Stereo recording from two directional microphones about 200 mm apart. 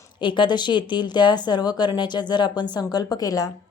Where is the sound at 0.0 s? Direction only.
25° left (ahead or behind).